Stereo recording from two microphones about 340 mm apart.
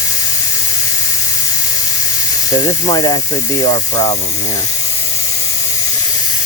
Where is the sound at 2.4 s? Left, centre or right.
Centre.